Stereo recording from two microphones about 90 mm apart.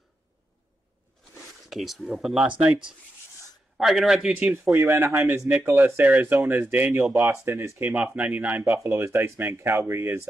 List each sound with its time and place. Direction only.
1.7 s a man's voice: centre (ahead or behind)
2.4 s speech: 15° right (ahead or behind)
3.7 s a man's voice: centre (ahead or behind)
4.6 s speech: 30° right (ahead or behind)
7.8 s speech: 15° right (ahead or behind)
8.7 s speech: 30° right (ahead or behind)